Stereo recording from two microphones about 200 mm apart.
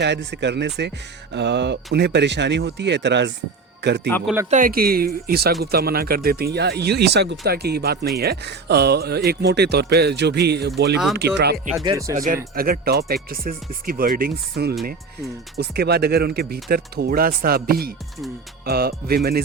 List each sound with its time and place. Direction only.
0.0 s speech: 60° right (ahead or behind)
4.4 s speech: 40° right (ahead or behind)
11.9 s speech: 15° right (ahead or behind)
12.1 s speech: 45° right (ahead or behind)